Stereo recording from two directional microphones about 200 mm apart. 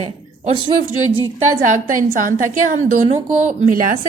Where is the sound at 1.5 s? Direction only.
40° right (ahead or behind).